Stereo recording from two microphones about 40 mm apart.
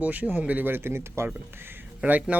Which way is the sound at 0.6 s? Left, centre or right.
Right.